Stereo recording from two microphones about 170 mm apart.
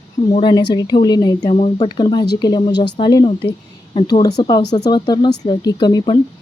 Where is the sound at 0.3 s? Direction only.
30° left (ahead or behind).